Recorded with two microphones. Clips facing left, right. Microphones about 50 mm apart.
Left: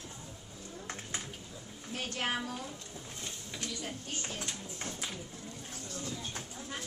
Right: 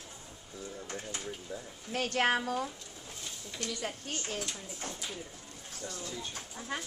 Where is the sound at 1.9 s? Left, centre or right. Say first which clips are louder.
Right 6 dB; right.